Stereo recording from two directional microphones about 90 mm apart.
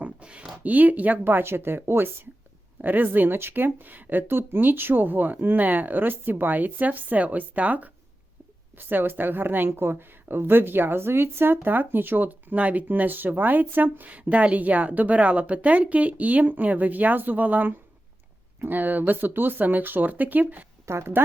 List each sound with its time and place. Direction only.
0.0 s a woman's voice: 10° right (ahead or behind)
20.8 s a woman's voice: 30° right (ahead or behind)